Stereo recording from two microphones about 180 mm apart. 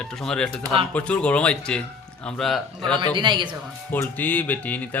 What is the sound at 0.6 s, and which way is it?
Speech, 30° right (ahead or behind).